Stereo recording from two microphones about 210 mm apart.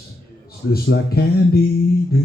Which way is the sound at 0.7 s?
50° left (ahead or behind).